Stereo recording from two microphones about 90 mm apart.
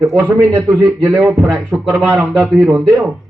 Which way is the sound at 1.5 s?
10° left (ahead or behind).